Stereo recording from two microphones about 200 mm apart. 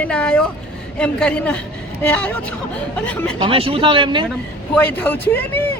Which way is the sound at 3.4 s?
25° right (ahead or behind).